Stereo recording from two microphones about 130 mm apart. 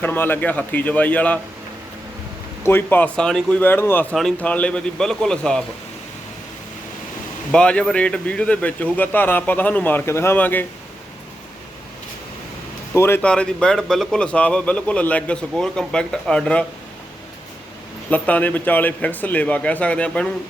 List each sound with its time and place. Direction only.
0.0 s a man's voice: 15° left (ahead or behind)
2.6 s a man's voice: 15° left (ahead or behind)
4.1 s speech: 5° left (ahead or behind)
7.5 s a man's voice: 5° left (ahead or behind)
12.9 s speech: 20° left (ahead or behind)
13.2 s a man's voice: 5° left (ahead or behind)
18.1 s a man's voice: 10° left (ahead or behind)